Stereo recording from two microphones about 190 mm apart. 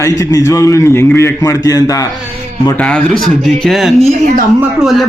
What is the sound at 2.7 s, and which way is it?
A woman's voice, 5° left (ahead or behind).